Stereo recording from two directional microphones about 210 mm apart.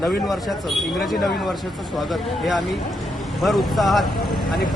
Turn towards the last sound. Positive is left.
turn(degrees=0)  # may be behind; listen again after turning